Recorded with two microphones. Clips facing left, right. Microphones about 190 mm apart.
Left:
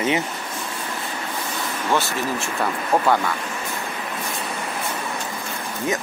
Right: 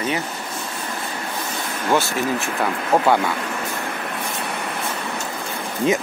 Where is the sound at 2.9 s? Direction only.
5° right (ahead or behind).